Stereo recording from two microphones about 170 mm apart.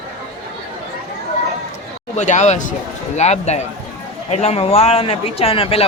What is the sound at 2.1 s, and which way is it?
A man's voice, 45° left (ahead or behind).